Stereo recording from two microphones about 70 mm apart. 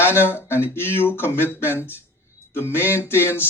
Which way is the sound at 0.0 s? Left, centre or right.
Left.